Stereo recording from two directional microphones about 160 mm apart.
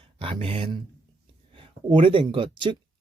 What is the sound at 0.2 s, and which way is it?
Speech, 35° right (ahead or behind).